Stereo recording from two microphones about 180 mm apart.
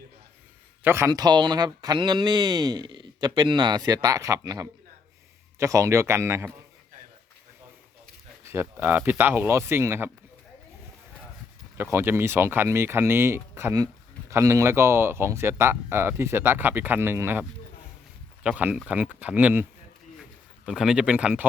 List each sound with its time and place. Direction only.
0.8 s speech: 15° right (ahead or behind)
8.4 s speech: 10° right (ahead or behind)
11.8 s speech: 15° right (ahead or behind)
18.4 s speech: 5° right (ahead or behind)
20.7 s speech: centre (ahead or behind)